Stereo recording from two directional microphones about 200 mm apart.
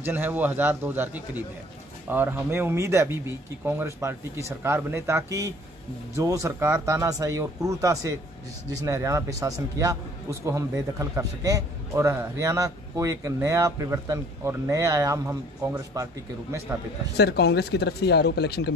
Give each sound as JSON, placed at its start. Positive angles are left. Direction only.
{"t": 0.0, "sound": "a man's voice", "side_deg": -10}
{"t": 17.2, "sound": "speech", "side_deg": 55}